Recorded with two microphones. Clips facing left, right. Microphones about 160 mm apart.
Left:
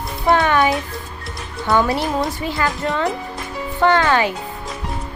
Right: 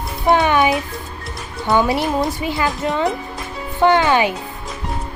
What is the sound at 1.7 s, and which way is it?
Speech, 20° right (ahead or behind).